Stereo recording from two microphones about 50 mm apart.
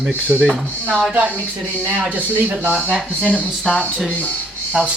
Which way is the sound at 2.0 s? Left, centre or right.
Right.